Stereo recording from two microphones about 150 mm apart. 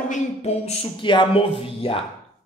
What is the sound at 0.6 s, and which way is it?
Speech, 30° left (ahead or behind).